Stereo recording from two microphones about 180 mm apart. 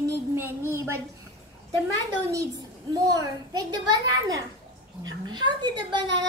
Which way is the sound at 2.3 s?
20° right (ahead or behind).